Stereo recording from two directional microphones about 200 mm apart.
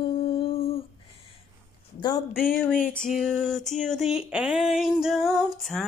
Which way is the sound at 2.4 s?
45° left (ahead or behind).